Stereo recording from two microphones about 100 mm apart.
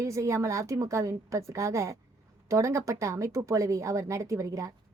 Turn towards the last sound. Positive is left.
turn(degrees=-30)  # may be behind; listen again after turning